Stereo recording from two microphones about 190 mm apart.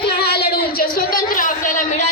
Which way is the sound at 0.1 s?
55° left (ahead or behind).